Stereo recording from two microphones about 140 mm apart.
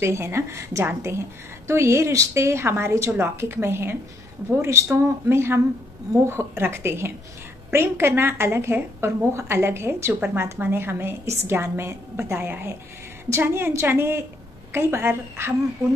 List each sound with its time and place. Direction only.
0.0 s a woman's voice: 20° right (ahead or behind)